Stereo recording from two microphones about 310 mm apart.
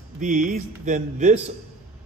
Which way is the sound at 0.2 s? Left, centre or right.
Right.